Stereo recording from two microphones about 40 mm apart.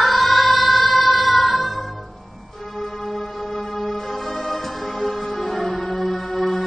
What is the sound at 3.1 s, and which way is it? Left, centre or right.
Music, centre.